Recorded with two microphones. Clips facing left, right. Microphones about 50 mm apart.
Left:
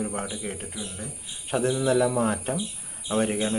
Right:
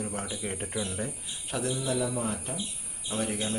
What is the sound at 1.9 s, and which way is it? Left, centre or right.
Speech, left.